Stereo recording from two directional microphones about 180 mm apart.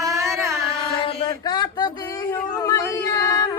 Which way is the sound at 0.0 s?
20° right (ahead or behind).